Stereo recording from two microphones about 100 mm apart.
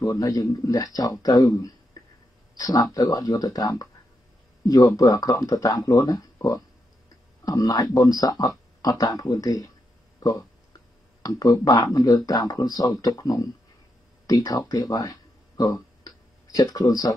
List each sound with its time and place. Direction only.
0.0 s speech: 35° left (ahead or behind)
2.0 s hiccup: 40° left (ahead or behind)
2.6 s speech: 40° left (ahead or behind)
4.9 s speech: 35° left (ahead or behind)
11.2 s speech: 40° left (ahead or behind)